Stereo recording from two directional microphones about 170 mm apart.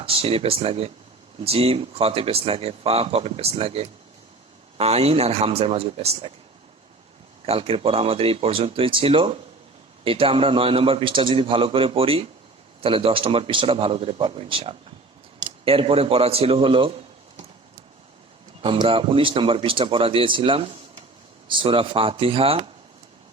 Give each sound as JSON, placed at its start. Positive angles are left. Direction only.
{"t": 0.0, "sound": "speech", "side_deg": -35}
{"t": 7.4, "sound": "a man's voice", "side_deg": -35}
{"t": 18.6, "sound": "speech", "side_deg": -30}